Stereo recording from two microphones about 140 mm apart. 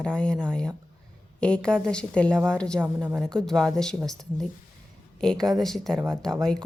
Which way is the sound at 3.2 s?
5° left (ahead or behind).